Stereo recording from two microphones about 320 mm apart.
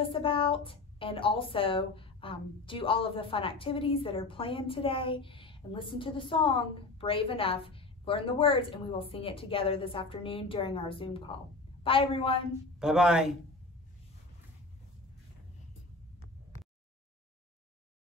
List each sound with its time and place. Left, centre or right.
0.1 s a woman's voice: centre
12.7 s a man's voice: centre